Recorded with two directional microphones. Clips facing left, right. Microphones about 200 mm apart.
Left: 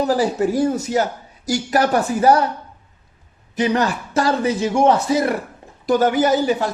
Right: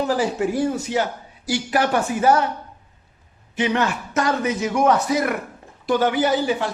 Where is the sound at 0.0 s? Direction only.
40° left (ahead or behind).